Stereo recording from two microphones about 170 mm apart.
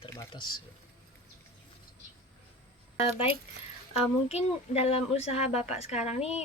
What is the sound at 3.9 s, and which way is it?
Speech, 35° left (ahead or behind).